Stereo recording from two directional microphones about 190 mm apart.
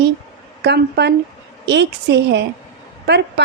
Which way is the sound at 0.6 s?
60° right (ahead or behind).